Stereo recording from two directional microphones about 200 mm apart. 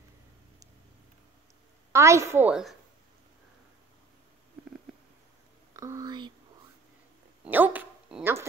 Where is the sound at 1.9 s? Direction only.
15° right (ahead or behind).